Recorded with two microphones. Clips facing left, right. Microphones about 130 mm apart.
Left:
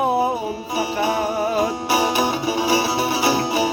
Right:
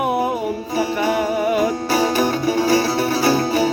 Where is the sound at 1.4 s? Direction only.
35° left (ahead or behind).